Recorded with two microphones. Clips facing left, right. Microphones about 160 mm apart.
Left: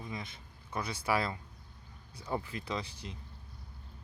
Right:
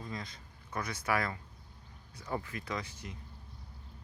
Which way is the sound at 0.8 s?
30° left (ahead or behind).